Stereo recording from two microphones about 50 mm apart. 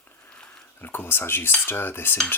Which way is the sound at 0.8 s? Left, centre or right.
Left.